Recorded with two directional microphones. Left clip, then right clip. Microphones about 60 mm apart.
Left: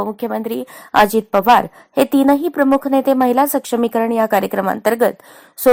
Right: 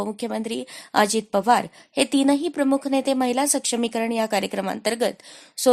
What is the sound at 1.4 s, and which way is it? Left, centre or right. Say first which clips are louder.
A woman's voice: left 8 dB; left.